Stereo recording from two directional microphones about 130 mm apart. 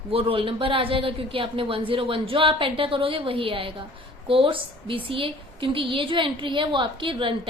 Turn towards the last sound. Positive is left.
turn(degrees=-40)  # may be behind; listen again after turning